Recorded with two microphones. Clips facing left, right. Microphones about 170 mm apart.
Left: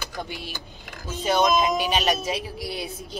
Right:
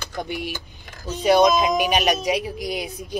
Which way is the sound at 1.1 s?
15° right (ahead or behind).